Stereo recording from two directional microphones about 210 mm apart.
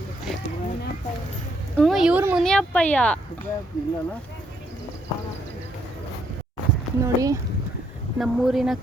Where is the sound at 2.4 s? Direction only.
5° left (ahead or behind).